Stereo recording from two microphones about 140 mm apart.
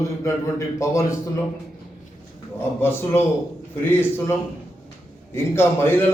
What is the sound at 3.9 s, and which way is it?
A man's voice, 15° left (ahead or behind).